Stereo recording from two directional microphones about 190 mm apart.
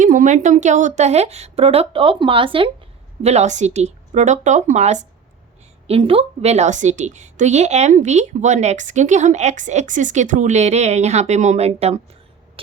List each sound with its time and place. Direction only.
0.0 s a woman's voice: 40° right (ahead or behind)